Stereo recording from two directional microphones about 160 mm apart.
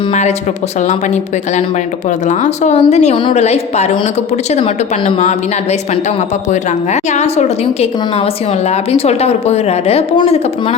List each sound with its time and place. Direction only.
0.1 s speech: 50° left (ahead or behind)
6.5 s a woman's voice: 45° left (ahead or behind)